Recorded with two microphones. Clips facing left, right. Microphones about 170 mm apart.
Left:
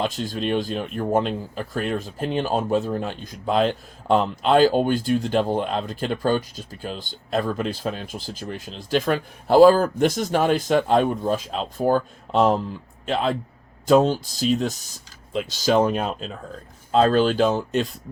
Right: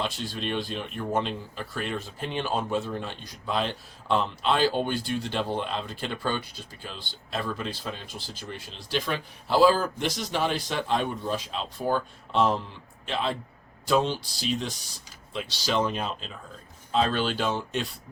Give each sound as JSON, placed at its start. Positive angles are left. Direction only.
{"t": 0.0, "sound": "speech", "side_deg": 45}